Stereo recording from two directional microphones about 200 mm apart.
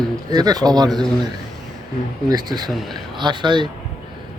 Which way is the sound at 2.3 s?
20° right (ahead or behind).